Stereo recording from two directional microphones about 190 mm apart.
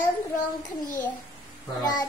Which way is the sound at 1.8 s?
20° left (ahead or behind).